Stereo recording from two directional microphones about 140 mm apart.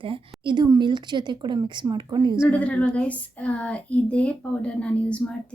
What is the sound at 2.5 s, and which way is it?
Speech, 10° left (ahead or behind).